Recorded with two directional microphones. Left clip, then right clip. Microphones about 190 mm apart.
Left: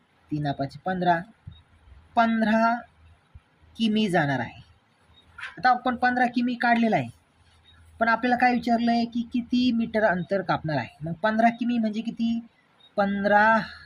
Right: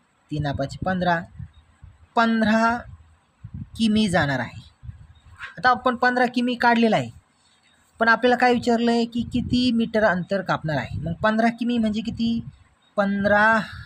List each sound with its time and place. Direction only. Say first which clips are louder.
0.3 s speech: right 2 dB; 30° right (ahead or behind)
5.5 s speech: right 3 dB; 25° right (ahead or behind)